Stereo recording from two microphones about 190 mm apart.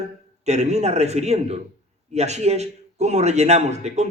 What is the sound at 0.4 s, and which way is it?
A man's voice, 35° right (ahead or behind).